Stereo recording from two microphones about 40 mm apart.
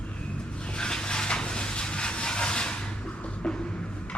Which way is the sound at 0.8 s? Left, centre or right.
Centre.